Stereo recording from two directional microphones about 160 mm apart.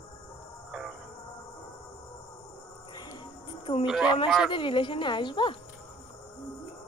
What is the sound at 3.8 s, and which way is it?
Speech, 5° right (ahead or behind).